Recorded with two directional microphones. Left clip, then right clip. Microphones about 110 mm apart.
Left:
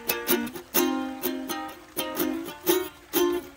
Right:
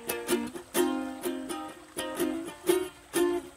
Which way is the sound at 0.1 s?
35° left (ahead or behind).